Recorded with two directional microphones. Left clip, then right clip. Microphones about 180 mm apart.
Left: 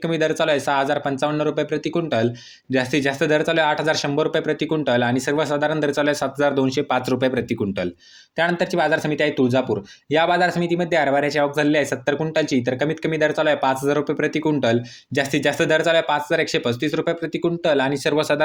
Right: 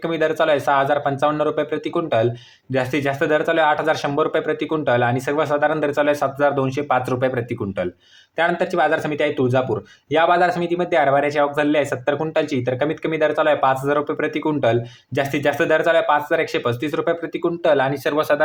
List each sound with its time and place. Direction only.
0.1 s speech: 30° left (ahead or behind)